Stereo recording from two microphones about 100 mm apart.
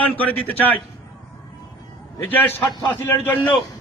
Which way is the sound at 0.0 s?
15° left (ahead or behind).